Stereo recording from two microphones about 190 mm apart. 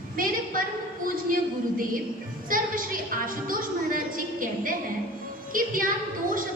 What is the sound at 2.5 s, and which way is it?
Music, 45° right (ahead or behind).